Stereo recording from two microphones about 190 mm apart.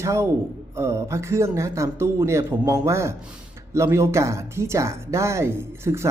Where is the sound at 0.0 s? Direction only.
15° right (ahead or behind).